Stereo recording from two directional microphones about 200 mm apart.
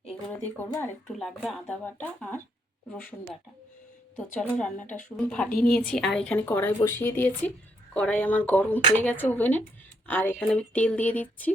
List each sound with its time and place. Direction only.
0.1 s speech: 5° left (ahead or behind)
4.2 s speech: 5° left (ahead or behind)
4.9 s speech: 40° left (ahead or behind)
5.1 s a woman's voice: 5° left (ahead or behind)